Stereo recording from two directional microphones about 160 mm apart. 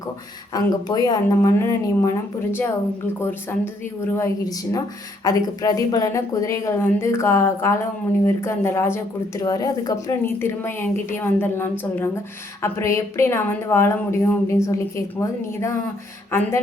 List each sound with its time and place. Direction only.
0.5 s a woman's voice: 25° left (ahead or behind)
4.1 s a woman's voice: 20° left (ahead or behind)